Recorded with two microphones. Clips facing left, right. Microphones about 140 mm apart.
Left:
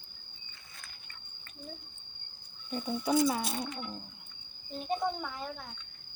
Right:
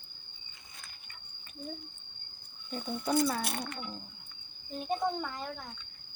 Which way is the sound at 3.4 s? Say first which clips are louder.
Left 1 dB; 65° right (ahead or behind).